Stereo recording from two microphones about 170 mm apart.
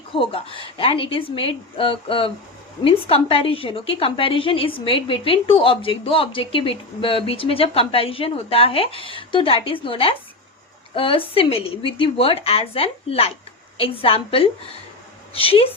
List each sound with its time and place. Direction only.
0.1 s a woman's voice: 30° left (ahead or behind)